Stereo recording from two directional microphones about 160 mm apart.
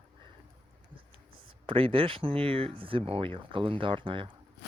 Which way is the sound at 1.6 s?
35° right (ahead or behind).